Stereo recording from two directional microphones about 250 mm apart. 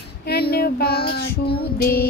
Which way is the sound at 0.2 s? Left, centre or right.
Left.